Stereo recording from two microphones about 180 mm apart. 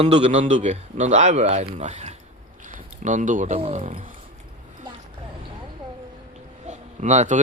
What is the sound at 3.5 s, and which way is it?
Speech, 35° right (ahead or behind).